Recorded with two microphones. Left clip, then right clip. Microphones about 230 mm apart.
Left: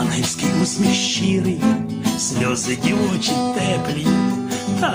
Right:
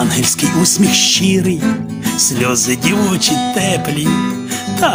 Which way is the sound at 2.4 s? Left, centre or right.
Right.